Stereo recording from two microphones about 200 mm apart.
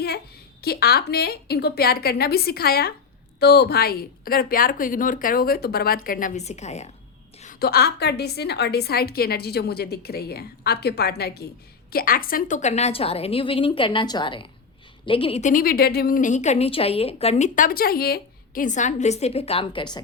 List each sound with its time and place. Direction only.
0.6 s a woman's voice: 50° left (ahead or behind); by 6.9 s 35° left (ahead or behind)
7.4 s a woman's voice: 50° left (ahead or behind); by 20.0 s 25° left (ahead or behind)